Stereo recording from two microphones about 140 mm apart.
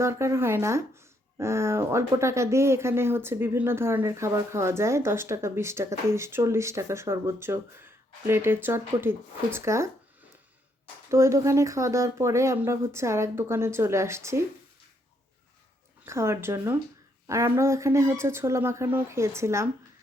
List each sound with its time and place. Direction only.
0.0 s speech: 20° right (ahead or behind)
11.1 s speech: 20° right (ahead or behind)
16.0 s speech: 20° right (ahead or behind)